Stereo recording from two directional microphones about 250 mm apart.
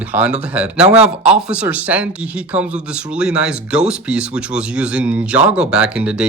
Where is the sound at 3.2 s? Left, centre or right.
Centre.